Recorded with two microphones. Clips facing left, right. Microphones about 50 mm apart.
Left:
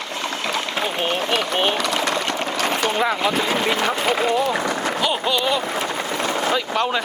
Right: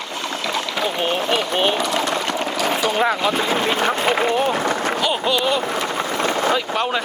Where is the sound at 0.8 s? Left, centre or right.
Centre.